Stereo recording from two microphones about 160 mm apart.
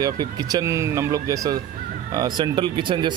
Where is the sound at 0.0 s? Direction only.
25° right (ahead or behind).